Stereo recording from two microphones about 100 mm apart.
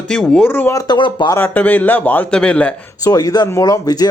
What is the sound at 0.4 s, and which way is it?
Speech, 20° left (ahead or behind).